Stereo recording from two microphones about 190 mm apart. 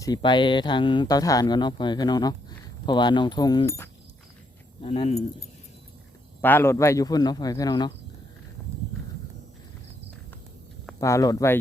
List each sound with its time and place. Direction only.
0.0 s speech: 20° left (ahead or behind)
4.8 s speech: 35° left (ahead or behind)
6.4 s speech: 10° left (ahead or behind)
11.0 s speech: 15° left (ahead or behind)